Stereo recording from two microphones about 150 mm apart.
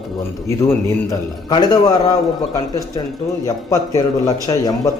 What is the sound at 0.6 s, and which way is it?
Speech, 20° left (ahead or behind).